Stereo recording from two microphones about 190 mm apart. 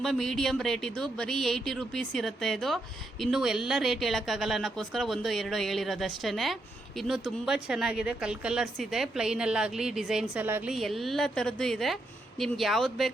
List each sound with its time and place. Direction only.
0.0 s speech: centre (ahead or behind)